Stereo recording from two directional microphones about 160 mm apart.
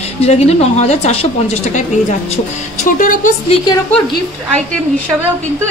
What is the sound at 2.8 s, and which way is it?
Speech, 55° left (ahead or behind).